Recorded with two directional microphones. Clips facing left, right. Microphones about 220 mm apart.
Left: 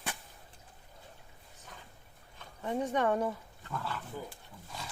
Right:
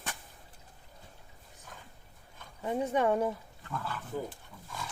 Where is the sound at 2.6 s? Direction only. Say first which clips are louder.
Right 2 dB; 10° right (ahead or behind).